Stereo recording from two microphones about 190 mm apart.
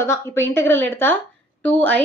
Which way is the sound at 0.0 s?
15° left (ahead or behind).